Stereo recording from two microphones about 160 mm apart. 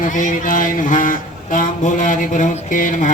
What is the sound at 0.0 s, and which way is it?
Speech, 55° left (ahead or behind).